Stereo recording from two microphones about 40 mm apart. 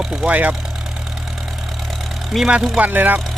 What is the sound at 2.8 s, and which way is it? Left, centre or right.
Speech, right.